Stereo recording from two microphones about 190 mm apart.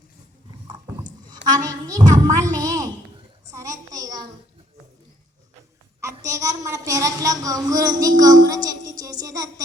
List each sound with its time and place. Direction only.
0.7 s rowboat: 20° right (ahead or behind)
1.6 s a child's voice: 20° right (ahead or behind)
3.5 s a sound: 15° right (ahead or behind)
6.0 s a woman's voice: 15° right (ahead or behind)